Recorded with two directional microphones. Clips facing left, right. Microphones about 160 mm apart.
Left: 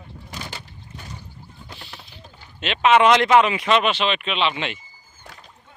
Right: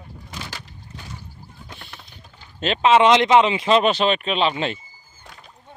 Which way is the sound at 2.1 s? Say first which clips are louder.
Right 1 dB; 40° right (ahead or behind).